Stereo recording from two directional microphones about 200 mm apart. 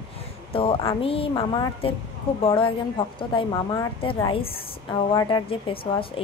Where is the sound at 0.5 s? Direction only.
25° left (ahead or behind).